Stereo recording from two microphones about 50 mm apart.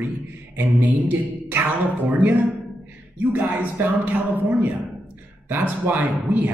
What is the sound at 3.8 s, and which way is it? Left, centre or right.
Speech, right.